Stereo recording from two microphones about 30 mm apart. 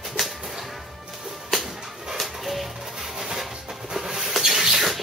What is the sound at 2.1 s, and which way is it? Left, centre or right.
Music, centre.